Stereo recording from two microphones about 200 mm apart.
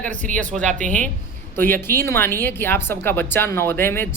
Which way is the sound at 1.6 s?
10° left (ahead or behind).